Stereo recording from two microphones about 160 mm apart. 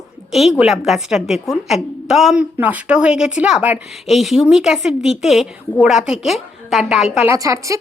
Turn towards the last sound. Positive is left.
turn(degrees=-20)  # may be behind; listen again after turning